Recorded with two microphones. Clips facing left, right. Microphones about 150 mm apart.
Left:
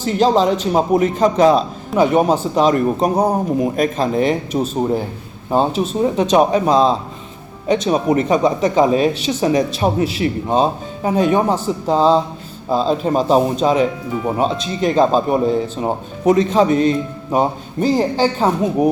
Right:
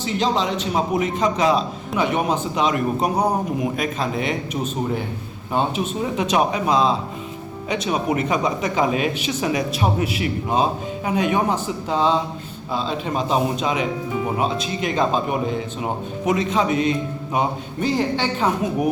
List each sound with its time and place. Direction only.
0.0 s speech: 45° left (ahead or behind)